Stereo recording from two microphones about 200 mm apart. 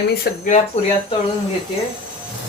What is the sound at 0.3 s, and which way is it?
Speech, 50° left (ahead or behind).